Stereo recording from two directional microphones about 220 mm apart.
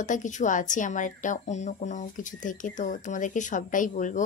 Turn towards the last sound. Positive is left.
turn(degrees=35)  # may be behind; listen again after turning